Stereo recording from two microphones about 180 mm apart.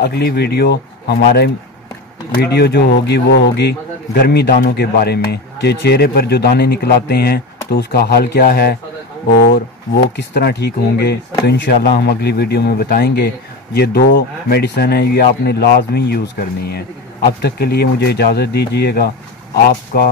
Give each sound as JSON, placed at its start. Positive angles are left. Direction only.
{"t": 0.0, "sound": "a man's voice", "side_deg": 65}
{"t": 10.1, "sound": "a man's voice", "side_deg": 70}